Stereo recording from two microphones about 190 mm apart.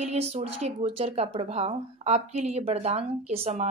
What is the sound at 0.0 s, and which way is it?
A woman's voice, 35° right (ahead or behind).